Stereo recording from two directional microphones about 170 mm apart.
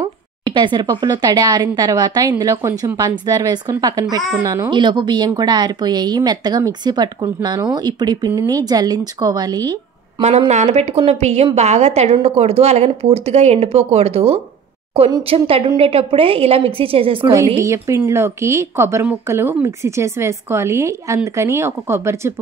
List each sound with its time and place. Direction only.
0.0 s speech: 25° right (ahead or behind)
10.5 s speech: 40° right (ahead or behind)
17.6 s speech: 15° right (ahead or behind)